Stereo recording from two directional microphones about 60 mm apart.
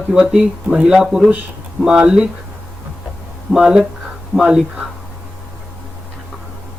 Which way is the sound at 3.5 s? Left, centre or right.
Centre.